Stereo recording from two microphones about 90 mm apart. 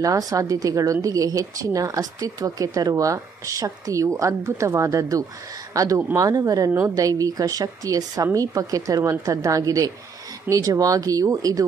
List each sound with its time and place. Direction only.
0.0 s speech: 40° right (ahead or behind)